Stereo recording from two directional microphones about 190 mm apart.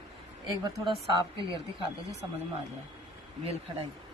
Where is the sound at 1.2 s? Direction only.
25° right (ahead or behind).